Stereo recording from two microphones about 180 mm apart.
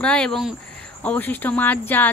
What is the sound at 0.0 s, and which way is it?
Speech, 5° left (ahead or behind).